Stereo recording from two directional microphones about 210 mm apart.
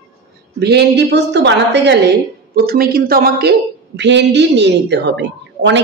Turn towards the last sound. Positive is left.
turn(degrees=-55)  # may be behind; listen again after turning